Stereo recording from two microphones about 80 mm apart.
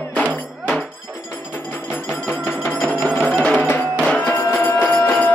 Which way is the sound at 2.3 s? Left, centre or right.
Left.